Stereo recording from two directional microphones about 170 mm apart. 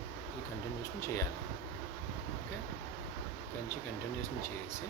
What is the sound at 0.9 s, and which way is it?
Speech, 15° left (ahead or behind).